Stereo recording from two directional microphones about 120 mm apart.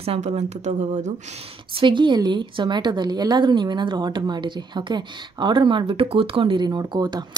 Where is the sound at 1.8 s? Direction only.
40° right (ahead or behind).